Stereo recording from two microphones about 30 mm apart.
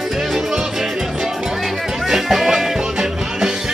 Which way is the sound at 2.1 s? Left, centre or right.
Centre.